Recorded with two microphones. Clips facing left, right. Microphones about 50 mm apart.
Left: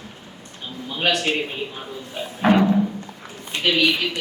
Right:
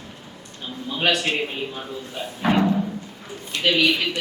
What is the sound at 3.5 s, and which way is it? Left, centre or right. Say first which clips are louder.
Speech: even; left.